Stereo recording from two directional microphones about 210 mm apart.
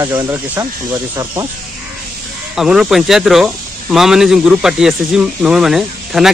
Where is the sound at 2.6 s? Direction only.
Centre (ahead or behind).